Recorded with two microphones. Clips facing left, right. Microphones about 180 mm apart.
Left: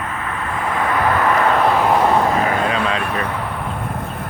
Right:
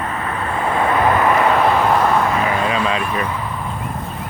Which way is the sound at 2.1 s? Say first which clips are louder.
Left 1 dB; 35° left (ahead or behind).